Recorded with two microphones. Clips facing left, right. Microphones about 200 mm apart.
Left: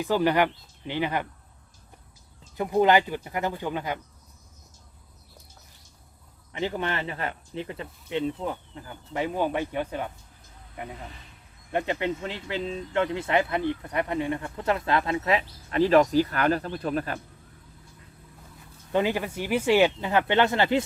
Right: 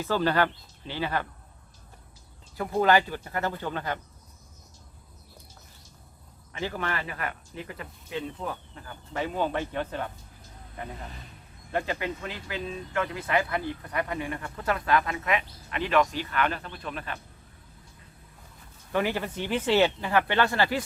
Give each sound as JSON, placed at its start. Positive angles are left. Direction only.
{"t": 0.0, "sound": "speech", "side_deg": 15}
{"t": 2.6, "sound": "speech", "side_deg": 20}
{"t": 6.5, "sound": "speech", "side_deg": 20}
{"t": 11.7, "sound": "speech", "side_deg": 20}
{"t": 18.9, "sound": "speech", "side_deg": 20}